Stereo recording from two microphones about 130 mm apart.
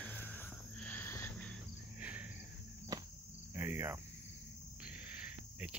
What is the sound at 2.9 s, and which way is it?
Cricket, 25° right (ahead or behind).